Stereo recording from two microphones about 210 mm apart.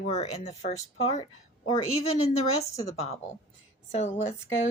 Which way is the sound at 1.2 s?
25° left (ahead or behind).